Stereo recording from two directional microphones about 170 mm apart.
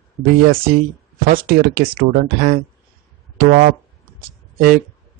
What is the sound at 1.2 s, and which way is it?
Speech, 60° right (ahead or behind).